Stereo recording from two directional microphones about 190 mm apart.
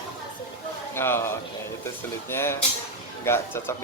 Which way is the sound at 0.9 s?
10° left (ahead or behind).